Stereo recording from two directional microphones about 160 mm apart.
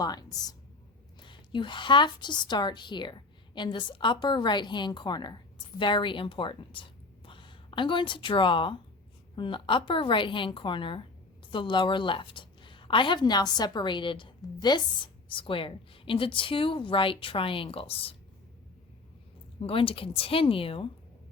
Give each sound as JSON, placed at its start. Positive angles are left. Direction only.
{"t": 0.0, "sound": "a woman's voice", "side_deg": 25}
{"t": 19.5, "sound": "a woman's voice", "side_deg": 35}